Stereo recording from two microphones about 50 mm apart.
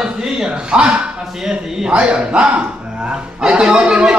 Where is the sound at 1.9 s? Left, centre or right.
Right.